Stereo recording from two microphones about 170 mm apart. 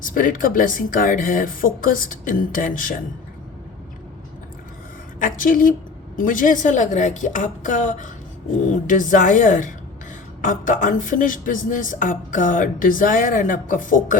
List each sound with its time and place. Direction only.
0.0 s speech: 55° left (ahead or behind)
5.2 s a woman's voice: 55° left (ahead or behind)